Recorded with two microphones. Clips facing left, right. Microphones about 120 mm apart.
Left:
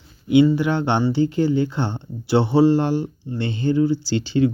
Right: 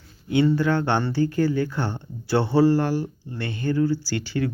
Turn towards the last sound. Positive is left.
turn(degrees=20)  # may be behind; listen again after turning